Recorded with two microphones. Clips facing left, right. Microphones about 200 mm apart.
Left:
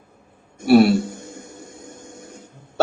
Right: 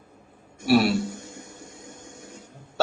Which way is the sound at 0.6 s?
45° left (ahead or behind).